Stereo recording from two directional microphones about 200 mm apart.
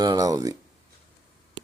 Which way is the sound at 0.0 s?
20° right (ahead or behind).